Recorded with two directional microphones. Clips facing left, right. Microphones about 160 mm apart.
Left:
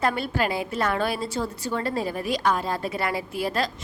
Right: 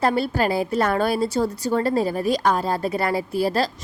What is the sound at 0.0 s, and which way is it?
A woman's voice, 35° right (ahead or behind).